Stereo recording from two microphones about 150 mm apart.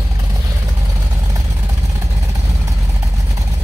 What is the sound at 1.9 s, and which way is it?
Vehicle, 20° right (ahead or behind).